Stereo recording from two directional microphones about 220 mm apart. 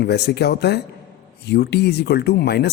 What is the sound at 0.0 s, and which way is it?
Speech, 50° left (ahead or behind).